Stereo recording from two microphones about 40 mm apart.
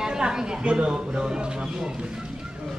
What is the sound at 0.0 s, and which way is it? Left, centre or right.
Speech, centre.